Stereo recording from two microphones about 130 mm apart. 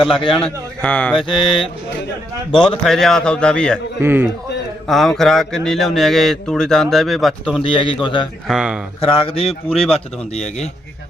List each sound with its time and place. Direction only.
0.3 s speech: 10° left (ahead or behind)
1.2 s mantra: 40° left (ahead or behind)
2.8 s speech: 5° left (ahead or behind)
4.0 s a man's voice: 15° right (ahead or behind)
4.9 s speech: centre (ahead or behind)
7.6 s mantra: 40° left (ahead or behind)
8.4 s speech: 5° right (ahead or behind)
9.0 s a man's voice: 50° left (ahead or behind)
9.6 s speech: 5° left (ahead or behind)
10.3 s speech: 60° left (ahead or behind)